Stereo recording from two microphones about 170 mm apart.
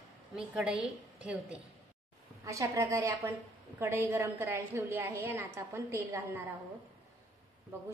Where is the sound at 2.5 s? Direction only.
20° right (ahead or behind).